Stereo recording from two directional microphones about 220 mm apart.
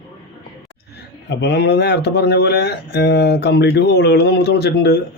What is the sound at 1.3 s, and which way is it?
Speech, 50° left (ahead or behind).